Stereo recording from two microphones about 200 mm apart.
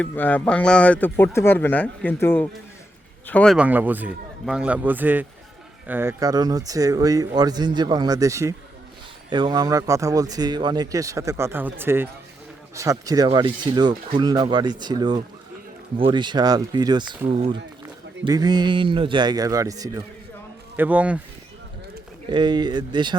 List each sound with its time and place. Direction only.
0.0 s speech: 10° left (ahead or behind)
22.3 s speech: 20° right (ahead or behind)